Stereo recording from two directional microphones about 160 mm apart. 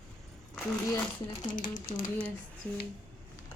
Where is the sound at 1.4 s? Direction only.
60° left (ahead or behind).